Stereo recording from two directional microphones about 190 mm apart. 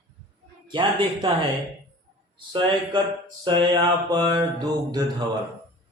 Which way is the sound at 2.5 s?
25° right (ahead or behind).